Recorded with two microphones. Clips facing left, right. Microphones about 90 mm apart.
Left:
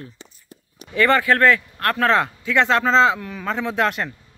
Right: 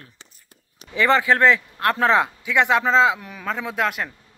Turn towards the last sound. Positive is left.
turn(degrees=-5)  # may be behind; listen again after turning